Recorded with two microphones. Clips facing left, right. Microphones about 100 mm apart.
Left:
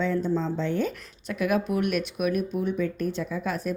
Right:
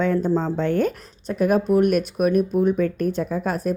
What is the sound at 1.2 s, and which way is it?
Speech, 40° right (ahead or behind).